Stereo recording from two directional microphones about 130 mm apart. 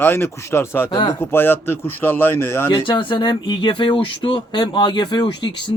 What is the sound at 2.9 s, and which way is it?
Speech, 35° left (ahead or behind).